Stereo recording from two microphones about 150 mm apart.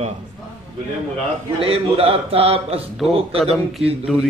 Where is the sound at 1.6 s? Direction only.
40° right (ahead or behind).